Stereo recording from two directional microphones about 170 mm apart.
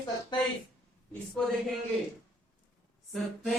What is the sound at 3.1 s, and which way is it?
Speech, centre (ahead or behind).